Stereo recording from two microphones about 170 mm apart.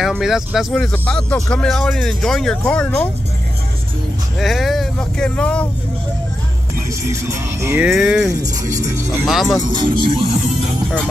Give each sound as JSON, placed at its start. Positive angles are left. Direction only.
{"t": 0.0, "sound": "speech", "side_deg": 0}
{"t": 4.4, "sound": "speech", "side_deg": 0}
{"t": 7.1, "sound": "music", "side_deg": -15}
{"t": 8.0, "sound": "speech", "side_deg": 0}
{"t": 9.7, "sound": "speech", "side_deg": -30}